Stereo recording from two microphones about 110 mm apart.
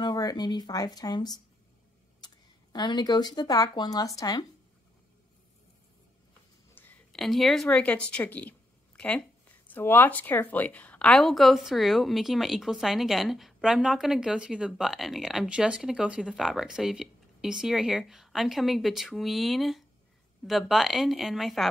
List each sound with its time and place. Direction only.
0.0 s speech: 35° left (ahead or behind)
7.1 s a woman's voice: centre (ahead or behind)